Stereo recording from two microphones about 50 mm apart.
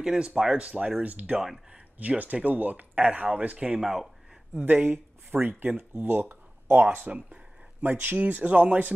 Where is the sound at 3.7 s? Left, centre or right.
Centre.